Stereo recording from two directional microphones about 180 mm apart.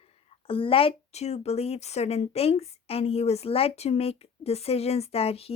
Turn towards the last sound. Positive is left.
turn(degrees=35)  # may be behind; listen again after turning